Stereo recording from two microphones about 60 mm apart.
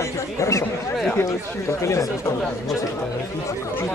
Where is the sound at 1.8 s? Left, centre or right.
Left.